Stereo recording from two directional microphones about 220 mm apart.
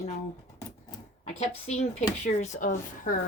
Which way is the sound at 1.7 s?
30° left (ahead or behind).